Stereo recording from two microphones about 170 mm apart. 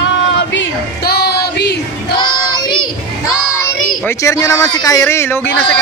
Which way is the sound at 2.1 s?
25° left (ahead or behind).